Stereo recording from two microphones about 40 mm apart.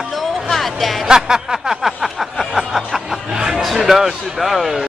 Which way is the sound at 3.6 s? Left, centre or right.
Centre.